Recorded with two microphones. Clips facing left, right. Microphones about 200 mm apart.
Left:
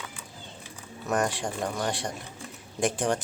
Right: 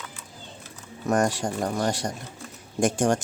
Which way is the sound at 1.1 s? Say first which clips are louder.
Right 4 dB; 40° right (ahead or behind).